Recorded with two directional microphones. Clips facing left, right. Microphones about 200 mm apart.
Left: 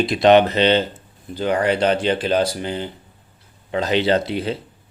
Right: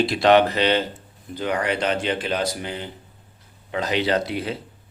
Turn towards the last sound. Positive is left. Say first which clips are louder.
# left 4 dB
turn(degrees=30)  # may be behind; listen again after turning